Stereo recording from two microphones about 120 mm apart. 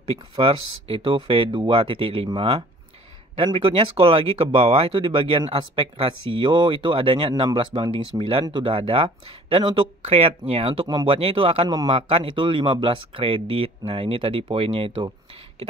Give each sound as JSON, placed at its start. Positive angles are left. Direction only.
{"t": 0.1, "sound": "speech", "side_deg": -50}